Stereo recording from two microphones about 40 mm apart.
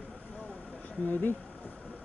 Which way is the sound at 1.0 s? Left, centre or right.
Left.